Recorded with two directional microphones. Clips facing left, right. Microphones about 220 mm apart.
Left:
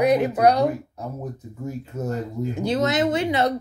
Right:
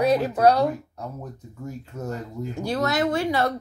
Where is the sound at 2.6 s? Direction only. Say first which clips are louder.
Left 2 dB; 20° left (ahead or behind).